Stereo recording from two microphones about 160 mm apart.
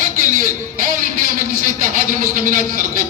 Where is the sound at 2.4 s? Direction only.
55° right (ahead or behind).